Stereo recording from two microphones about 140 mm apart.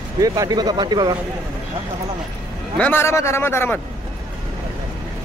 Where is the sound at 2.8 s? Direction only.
15° left (ahead or behind).